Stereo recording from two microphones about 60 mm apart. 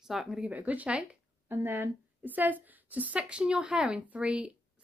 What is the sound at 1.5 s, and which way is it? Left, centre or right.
A woman's voice, right.